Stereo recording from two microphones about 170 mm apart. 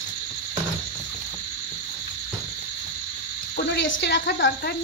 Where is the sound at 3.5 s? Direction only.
90° left.